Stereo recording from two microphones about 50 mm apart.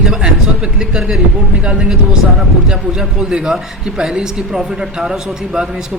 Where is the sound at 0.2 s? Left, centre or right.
Centre.